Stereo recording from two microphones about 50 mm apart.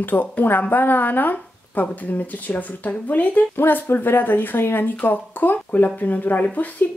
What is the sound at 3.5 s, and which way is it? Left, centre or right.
Speech, left.